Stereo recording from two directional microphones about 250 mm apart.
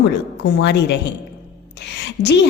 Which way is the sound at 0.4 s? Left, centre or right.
Left.